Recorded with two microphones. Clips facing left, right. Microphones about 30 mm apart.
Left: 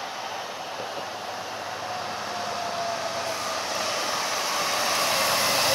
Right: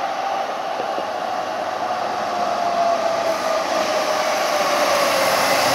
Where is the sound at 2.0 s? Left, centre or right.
Right.